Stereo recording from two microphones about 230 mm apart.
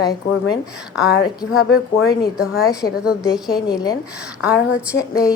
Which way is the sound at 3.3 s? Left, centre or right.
Centre.